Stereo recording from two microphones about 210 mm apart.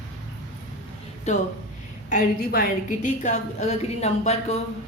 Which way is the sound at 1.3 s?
35° left (ahead or behind).